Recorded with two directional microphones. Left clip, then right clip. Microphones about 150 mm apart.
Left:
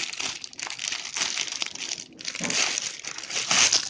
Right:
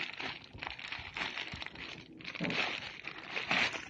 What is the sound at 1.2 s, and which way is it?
Crumpling, 40° left (ahead or behind).